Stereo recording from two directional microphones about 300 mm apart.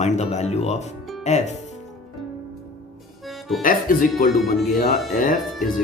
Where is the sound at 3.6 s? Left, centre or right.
Left.